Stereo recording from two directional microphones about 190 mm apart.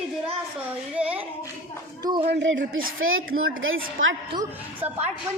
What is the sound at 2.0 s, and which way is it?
Speech, 25° right (ahead or behind).